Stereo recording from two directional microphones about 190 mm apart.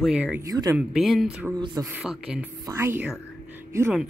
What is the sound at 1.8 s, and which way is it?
Speech, 5° right (ahead or behind).